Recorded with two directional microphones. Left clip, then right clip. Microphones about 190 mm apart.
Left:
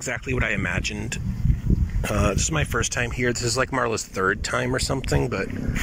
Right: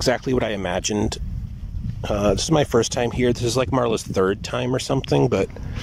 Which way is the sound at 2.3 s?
30° right (ahead or behind).